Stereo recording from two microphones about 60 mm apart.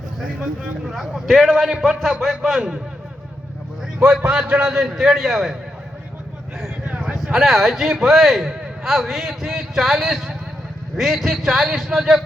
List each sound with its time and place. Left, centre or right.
0.9 s speech: centre
4.0 s a man's voice: centre
6.8 s a sound: right
7.1 s speech: centre